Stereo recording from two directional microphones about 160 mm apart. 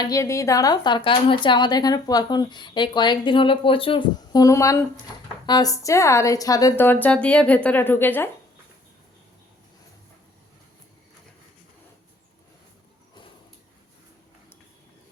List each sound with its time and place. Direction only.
0.0 s a woman's voice: 20° left (ahead or behind)